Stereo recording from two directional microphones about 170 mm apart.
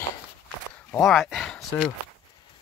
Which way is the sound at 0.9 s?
Centre (ahead or behind).